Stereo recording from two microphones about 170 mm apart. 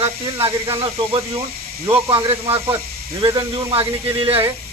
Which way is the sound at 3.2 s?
25° right (ahead or behind).